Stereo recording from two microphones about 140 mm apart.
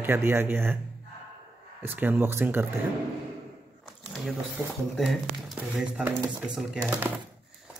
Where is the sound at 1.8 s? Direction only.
15° right (ahead or behind).